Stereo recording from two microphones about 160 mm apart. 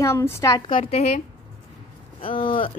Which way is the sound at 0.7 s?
35° left (ahead or behind).